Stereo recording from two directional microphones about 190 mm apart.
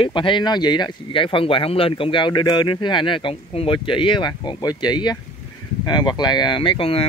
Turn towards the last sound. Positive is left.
turn(degrees=30)  # may be behind; listen again after turning